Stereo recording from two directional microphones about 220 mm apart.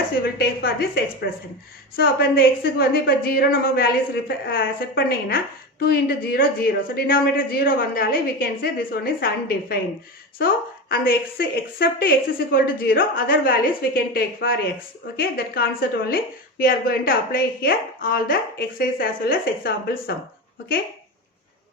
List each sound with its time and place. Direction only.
0.3 s a woman's voice: 45° left (ahead or behind)